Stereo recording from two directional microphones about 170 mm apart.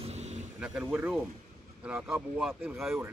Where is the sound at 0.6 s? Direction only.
10° right (ahead or behind).